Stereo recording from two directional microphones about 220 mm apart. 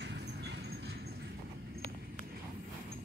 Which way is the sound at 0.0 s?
50° right (ahead or behind).